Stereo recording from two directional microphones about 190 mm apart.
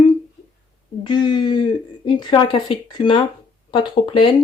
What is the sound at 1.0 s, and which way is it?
Speech, 25° left (ahead or behind).